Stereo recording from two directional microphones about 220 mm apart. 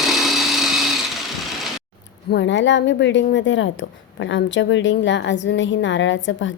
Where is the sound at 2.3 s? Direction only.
55° left (ahead or behind).